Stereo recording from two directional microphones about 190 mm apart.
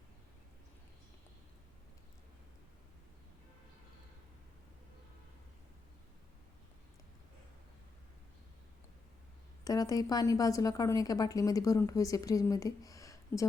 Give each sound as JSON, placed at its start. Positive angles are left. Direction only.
{"t": 9.6, "sound": "a woman's voice", "side_deg": 20}